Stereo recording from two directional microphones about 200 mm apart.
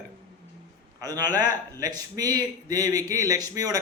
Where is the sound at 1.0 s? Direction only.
20° right (ahead or behind).